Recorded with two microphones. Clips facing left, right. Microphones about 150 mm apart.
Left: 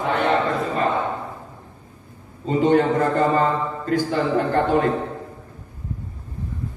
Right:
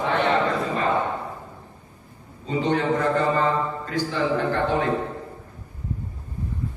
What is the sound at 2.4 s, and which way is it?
A man's voice, 45° left (ahead or behind).